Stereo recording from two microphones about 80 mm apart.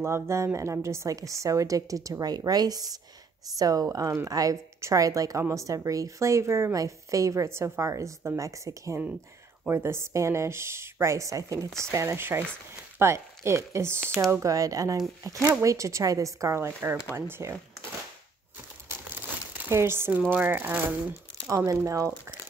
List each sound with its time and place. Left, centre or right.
0.0 s a woman's voice: right
18.9 s crumpling: right
20.1 s speech: right
21.5 s a woman's voice: right